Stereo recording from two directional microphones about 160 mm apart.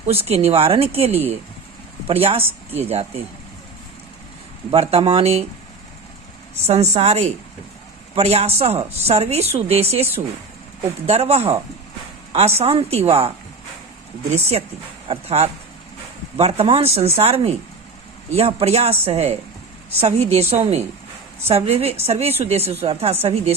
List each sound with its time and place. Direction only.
0.1 s a woman's voice: 40° right (ahead or behind)
4.7 s a woman's voice: 35° right (ahead or behind)
6.7 s a woman's voice: 40° right (ahead or behind)